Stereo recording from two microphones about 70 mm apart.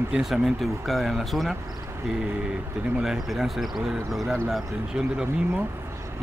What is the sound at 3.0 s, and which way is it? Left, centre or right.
Speech, centre.